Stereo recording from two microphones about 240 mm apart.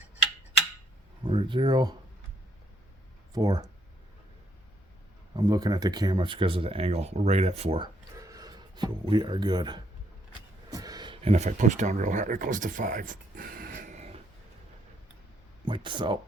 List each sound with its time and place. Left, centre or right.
1.2 s speech: centre
3.3 s speech: centre
5.4 s speech: centre
8.2 s speech: centre
15.6 s speech: centre